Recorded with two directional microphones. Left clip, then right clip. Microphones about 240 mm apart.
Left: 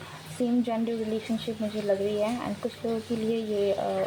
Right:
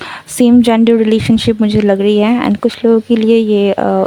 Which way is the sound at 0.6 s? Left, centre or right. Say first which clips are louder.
Right 19 dB; right.